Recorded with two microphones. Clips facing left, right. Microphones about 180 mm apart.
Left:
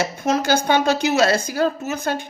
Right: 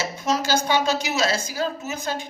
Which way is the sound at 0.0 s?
55° left (ahead or behind).